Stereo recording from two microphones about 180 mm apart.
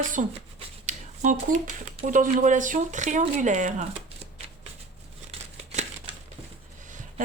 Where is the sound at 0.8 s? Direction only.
45° right (ahead or behind).